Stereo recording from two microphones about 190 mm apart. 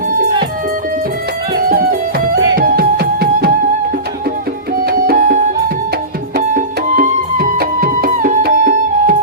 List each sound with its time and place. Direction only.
1.7 s music: 50° right (ahead or behind)
4.8 s music: 50° right (ahead or behind)